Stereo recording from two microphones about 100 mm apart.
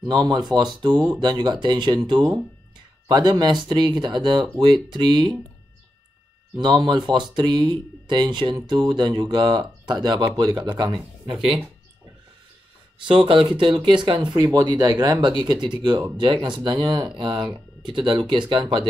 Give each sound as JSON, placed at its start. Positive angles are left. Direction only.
{"t": 0.1, "sound": "speech", "side_deg": -45}
{"t": 6.5, "sound": "speech", "side_deg": -45}
{"t": 13.0, "sound": "speech", "side_deg": -60}
{"t": 14.3, "sound": "speech", "side_deg": -40}